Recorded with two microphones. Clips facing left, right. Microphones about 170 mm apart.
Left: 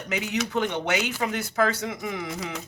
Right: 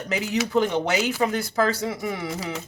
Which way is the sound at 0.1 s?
35° right (ahead or behind).